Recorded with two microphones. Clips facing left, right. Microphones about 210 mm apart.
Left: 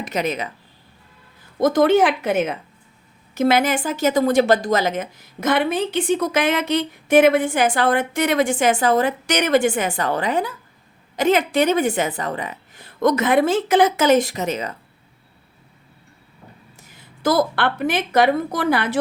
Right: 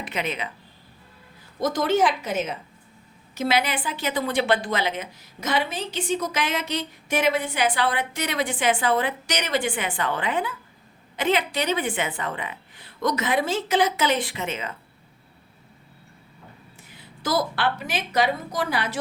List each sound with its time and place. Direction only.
0.0 s speech: 40° left (ahead or behind)
1.5 s a woman's voice: 55° left (ahead or behind); by 14.8 s 40° left (ahead or behind)
16.8 s a woman's voice: 45° left (ahead or behind)